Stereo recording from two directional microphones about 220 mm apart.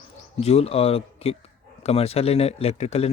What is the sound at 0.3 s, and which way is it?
Speech, 30° left (ahead or behind).